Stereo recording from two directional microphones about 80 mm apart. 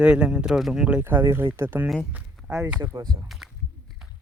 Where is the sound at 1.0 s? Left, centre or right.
Right.